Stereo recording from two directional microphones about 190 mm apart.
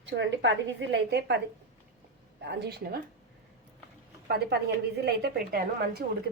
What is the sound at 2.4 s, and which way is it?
Speech, 60° right (ahead or behind).